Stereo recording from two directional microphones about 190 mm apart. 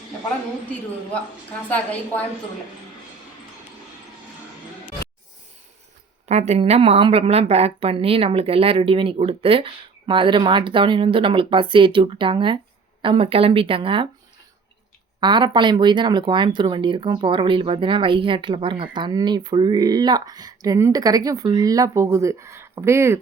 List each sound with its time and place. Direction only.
1.7 s a woman's voice: 5° left (ahead or behind)
6.2 s speech: 35° right (ahead or behind)
15.2 s speech: 25° right (ahead or behind)